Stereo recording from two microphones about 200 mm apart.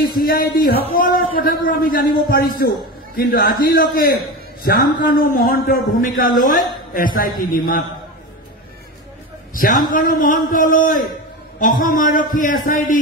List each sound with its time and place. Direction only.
0.2 s a man's voice: 45° left (ahead or behind)
9.8 s a man's voice: 45° left (ahead or behind)